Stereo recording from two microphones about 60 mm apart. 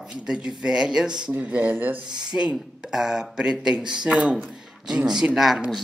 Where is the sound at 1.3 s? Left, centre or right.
Right.